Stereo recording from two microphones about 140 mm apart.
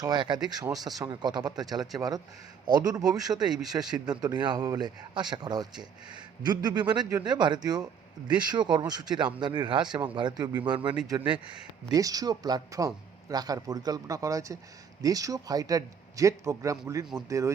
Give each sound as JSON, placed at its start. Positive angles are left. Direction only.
{"t": 0.0, "sound": "speech", "side_deg": -30}